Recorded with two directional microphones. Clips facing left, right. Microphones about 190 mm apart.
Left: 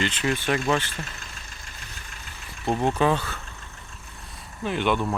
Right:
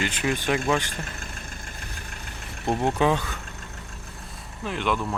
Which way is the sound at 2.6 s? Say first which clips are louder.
Even; 15° left (ahead or behind).